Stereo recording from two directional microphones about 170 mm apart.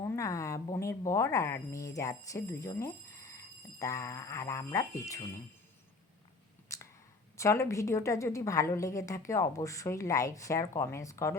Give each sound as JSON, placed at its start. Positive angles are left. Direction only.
{"t": 0.0, "sound": "speech", "side_deg": 20}
{"t": 6.7, "sound": "a sound", "side_deg": 20}
{"t": 7.3, "sound": "a woman's voice", "side_deg": 15}